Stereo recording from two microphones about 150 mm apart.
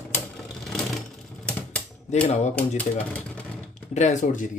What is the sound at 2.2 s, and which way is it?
Speech, 50° left (ahead or behind).